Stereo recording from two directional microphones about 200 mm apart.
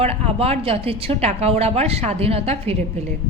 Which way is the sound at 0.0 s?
30° right (ahead or behind).